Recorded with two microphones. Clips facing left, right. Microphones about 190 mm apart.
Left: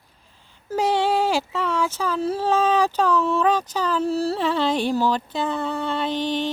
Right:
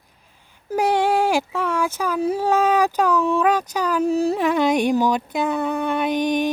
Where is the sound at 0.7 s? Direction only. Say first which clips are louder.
Right 2 dB; 10° right (ahead or behind).